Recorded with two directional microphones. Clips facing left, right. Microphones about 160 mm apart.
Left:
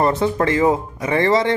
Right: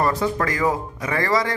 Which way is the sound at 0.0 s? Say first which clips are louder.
Left 4 dB; 25° left (ahead or behind).